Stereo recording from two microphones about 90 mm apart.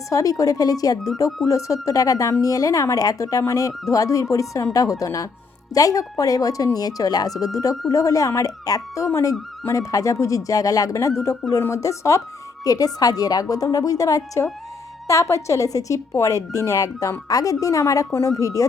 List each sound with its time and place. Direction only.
0.1 s a woman's voice: 40° left (ahead or behind)